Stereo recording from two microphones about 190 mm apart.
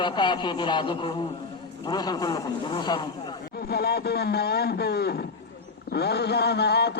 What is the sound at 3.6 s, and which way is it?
A man's voice, 55° left (ahead or behind).